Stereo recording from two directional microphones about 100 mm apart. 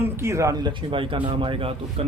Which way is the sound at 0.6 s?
55° right (ahead or behind).